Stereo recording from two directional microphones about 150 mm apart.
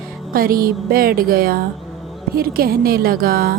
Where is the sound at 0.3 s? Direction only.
75° right (ahead or behind).